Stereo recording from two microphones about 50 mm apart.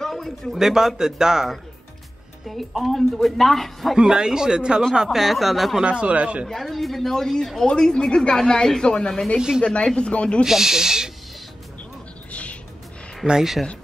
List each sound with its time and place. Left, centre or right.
0.0 s a sound: centre
0.6 s speech: centre
3.9 s speech: centre
5.8 s speech: right
6.5 s speech: centre; by 10.4 s left
10.4 s speech: centre
12.3 s music: left
13.3 s speech: centre